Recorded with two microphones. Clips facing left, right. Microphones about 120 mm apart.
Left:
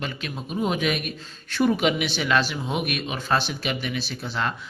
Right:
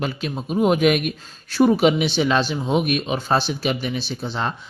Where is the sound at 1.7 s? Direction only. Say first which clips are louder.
Right 5 dB; 35° right (ahead or behind).